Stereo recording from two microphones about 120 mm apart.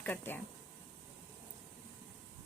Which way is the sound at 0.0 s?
15° left (ahead or behind).